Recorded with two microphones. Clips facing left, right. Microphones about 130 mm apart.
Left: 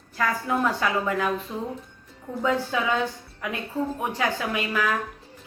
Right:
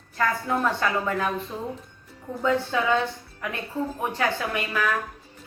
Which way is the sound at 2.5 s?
10° left (ahead or behind).